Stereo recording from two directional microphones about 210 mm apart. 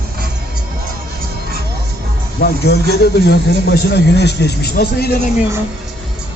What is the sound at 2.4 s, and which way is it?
Speech, 50° left (ahead or behind).